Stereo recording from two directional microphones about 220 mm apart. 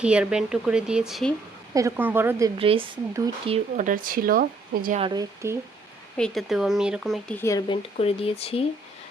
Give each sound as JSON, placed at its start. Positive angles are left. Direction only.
{"t": 0.0, "sound": "speech", "side_deg": -5}
{"t": 1.7, "sound": "a woman's voice", "side_deg": -10}
{"t": 2.6, "sound": "a woman's voice", "side_deg": -25}
{"t": 3.5, "sound": "speech", "side_deg": -35}
{"t": 4.9, "sound": "a woman's voice", "side_deg": -20}
{"t": 6.1, "sound": "speech", "side_deg": 0}